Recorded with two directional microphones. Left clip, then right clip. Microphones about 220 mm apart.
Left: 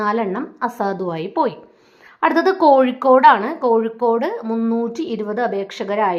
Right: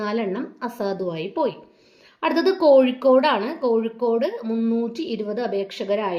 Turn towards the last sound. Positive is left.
turn(degrees=15)  # may be behind; listen again after turning